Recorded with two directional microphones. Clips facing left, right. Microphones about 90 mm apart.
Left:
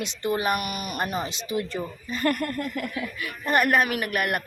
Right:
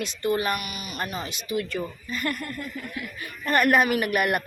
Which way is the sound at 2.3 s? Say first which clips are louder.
Left 9 dB; 50° left (ahead or behind).